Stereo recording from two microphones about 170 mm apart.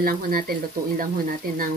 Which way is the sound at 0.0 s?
60° right (ahead or behind).